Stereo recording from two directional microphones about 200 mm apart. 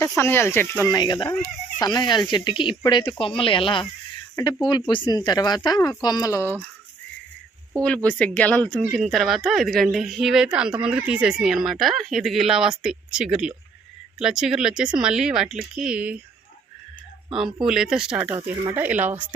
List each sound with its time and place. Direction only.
0.2 s speech: 10° left (ahead or behind)
7.8 s speech: 5° left (ahead or behind)
17.2 s speech: 5° right (ahead or behind)